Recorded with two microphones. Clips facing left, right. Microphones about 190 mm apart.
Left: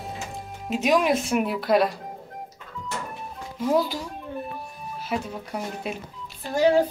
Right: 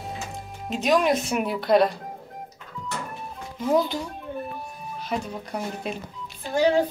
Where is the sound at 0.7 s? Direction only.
5° left (ahead or behind).